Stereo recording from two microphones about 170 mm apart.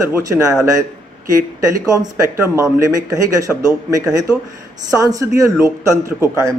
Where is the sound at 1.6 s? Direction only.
20° right (ahead or behind).